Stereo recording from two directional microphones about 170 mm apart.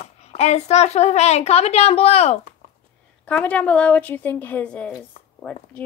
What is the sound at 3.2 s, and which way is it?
A woman's voice, 10° left (ahead or behind).